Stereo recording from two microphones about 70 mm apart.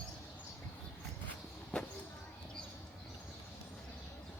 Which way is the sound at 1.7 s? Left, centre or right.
Centre.